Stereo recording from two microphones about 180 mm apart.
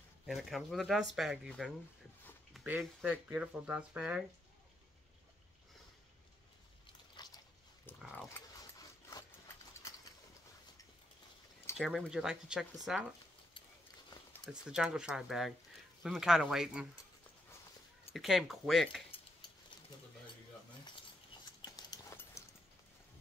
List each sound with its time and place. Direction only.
0.3 s speech: centre (ahead or behind)
7.2 s a sound: 25° left (ahead or behind)
8.3 s dog: 20° left (ahead or behind)
11.7 s speech: centre (ahead or behind)
14.4 s speech: centre (ahead or behind)
18.1 s speech: centre (ahead or behind)
21.5 s a sound: 20° left (ahead or behind)